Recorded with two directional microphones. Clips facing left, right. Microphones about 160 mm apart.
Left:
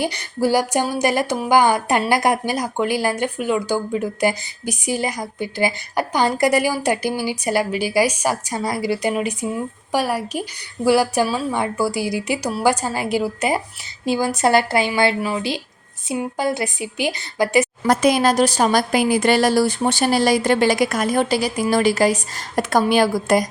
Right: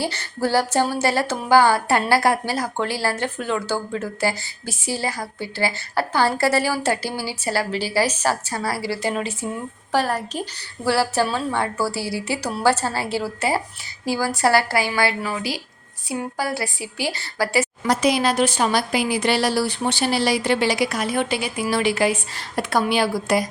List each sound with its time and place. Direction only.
0.0 s a woman's voice: 15° left (ahead or behind)
17.8 s a woman's voice: 50° left (ahead or behind)